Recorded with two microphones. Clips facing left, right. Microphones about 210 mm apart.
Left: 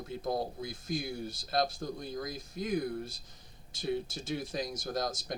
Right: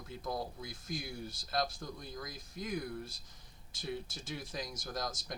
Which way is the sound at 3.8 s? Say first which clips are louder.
Left 7 dB; 25° left (ahead or behind).